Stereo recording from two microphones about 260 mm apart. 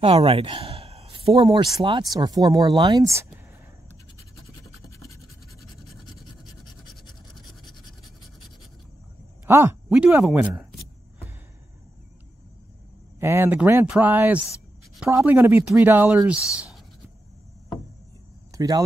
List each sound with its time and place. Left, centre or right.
0.0 s speech: right
4.9 s scratch: centre
7.6 s scratch: centre
9.5 s a sound: centre
13.2 s speech: centre
18.5 s speech: centre